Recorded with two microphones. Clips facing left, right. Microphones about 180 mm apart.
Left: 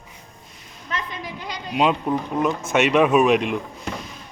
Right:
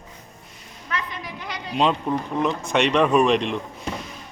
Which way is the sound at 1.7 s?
5° left (ahead or behind).